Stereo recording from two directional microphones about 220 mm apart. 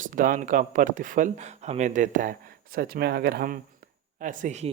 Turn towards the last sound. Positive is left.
turn(degrees=-30)  # may be behind; listen again after turning